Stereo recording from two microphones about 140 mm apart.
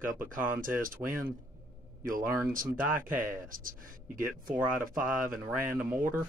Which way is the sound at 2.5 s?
75° right (ahead or behind).